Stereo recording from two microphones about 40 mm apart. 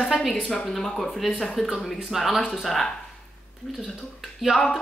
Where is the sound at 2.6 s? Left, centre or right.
Centre.